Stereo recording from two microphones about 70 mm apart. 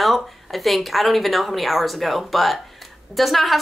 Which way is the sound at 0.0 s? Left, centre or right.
Centre.